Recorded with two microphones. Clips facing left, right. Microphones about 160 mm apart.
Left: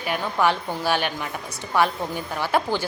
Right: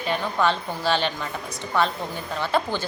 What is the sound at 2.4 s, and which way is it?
Speech, 10° left (ahead or behind).